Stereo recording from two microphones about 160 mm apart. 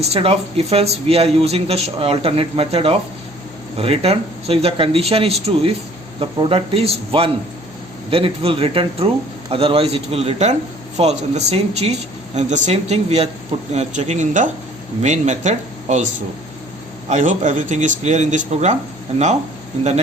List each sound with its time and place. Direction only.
0.0 s speech: 40° right (ahead or behind)
17.1 s speech: 50° right (ahead or behind)